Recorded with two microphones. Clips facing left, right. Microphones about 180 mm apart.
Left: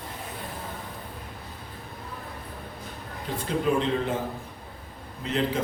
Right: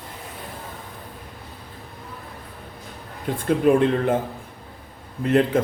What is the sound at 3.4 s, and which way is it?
Speech, 55° right (ahead or behind).